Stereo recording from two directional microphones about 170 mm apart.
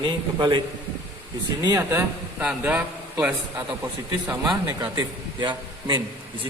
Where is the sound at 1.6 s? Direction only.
20° right (ahead or behind).